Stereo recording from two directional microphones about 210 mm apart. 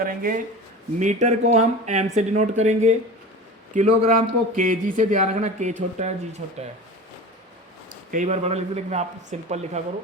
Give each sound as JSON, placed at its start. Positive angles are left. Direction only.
{"t": 0.0, "sound": "speech", "side_deg": -40}
{"t": 8.1, "sound": "speech", "side_deg": -35}